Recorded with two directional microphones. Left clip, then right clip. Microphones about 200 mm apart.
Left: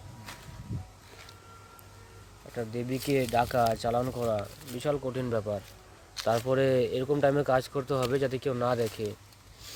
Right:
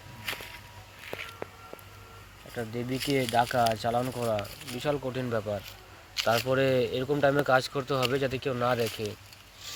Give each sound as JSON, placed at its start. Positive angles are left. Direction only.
{"t": 2.6, "sound": "speech", "side_deg": 20}